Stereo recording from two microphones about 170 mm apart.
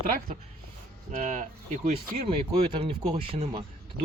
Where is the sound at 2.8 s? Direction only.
30° right (ahead or behind).